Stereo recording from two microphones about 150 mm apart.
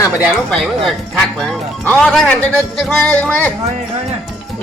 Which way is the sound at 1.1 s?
5° left (ahead or behind).